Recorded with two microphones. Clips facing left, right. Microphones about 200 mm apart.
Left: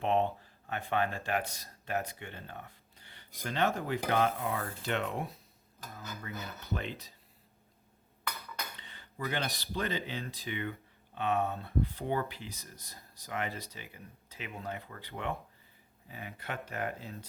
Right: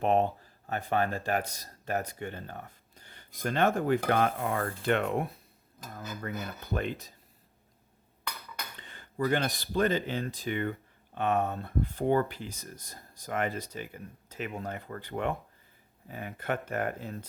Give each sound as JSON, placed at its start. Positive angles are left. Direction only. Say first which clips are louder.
{"t": 0.0, "sound": "speech", "louder": "right 3 dB", "side_deg": -40}
{"t": 8.8, "sound": "speech", "louder": "right 11 dB", "side_deg": -50}